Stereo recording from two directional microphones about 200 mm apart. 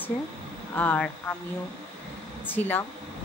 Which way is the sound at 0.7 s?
5° left (ahead or behind).